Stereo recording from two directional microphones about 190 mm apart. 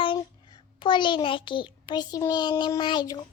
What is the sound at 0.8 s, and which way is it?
A child's voice, 25° left (ahead or behind).